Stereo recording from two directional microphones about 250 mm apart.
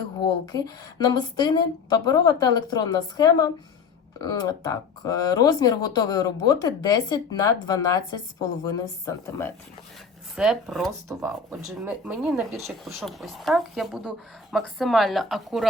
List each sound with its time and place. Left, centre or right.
0.2 s a woman's voice: centre
10.3 s speech: centre